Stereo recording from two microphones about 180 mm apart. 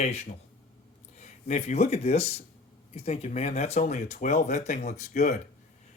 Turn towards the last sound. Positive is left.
turn(degrees=40)  # may be behind; listen again after turning